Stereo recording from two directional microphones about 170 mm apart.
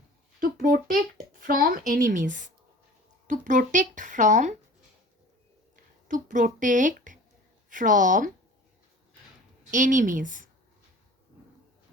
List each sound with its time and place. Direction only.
0.6 s a child's voice: 55° right (ahead or behind)
5.7 s a child's voice: 50° right (ahead or behind)
9.6 s a child's voice: 50° right (ahead or behind)